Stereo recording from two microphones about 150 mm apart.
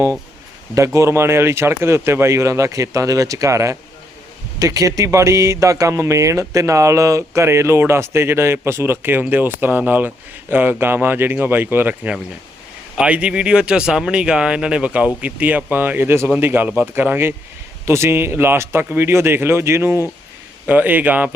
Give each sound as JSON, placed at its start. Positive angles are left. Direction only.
{"t": 0.7, "sound": "speech", "side_deg": -20}